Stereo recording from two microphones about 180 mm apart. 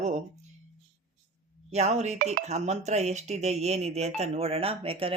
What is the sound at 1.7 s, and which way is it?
Speech, 35° right (ahead or behind).